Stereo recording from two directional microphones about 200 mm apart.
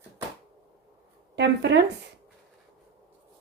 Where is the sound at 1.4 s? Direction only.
60° right (ahead or behind).